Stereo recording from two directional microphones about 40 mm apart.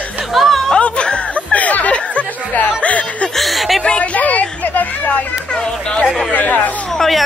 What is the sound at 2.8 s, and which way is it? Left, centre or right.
Snicker, left.